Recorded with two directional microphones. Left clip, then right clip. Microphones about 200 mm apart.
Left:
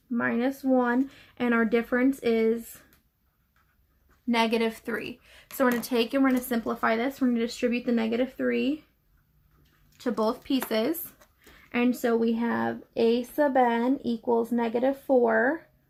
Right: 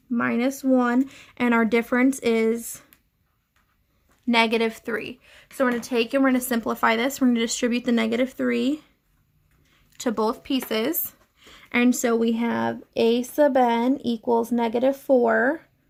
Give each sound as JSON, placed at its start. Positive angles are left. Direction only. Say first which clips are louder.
{"t": 0.1, "sound": "speech", "louder": "right 3 dB", "side_deg": -40}
{"t": 4.3, "sound": "a woman's voice", "louder": "right 5 dB", "side_deg": -20}
{"t": 6.5, "sound": "speech", "louder": "right 5 dB", "side_deg": -35}
{"t": 10.2, "sound": "speech", "louder": "right 2 dB", "side_deg": -20}
{"t": 11.5, "sound": "speech", "louder": "right 5 dB", "side_deg": -40}